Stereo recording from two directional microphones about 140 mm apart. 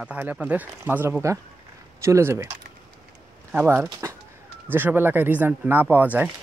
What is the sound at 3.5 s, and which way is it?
Speech, 15° right (ahead or behind).